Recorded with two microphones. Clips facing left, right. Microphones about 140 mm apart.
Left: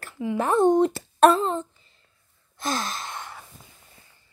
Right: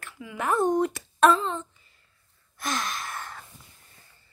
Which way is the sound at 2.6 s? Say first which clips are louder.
Left 2 dB; 30° left (ahead or behind).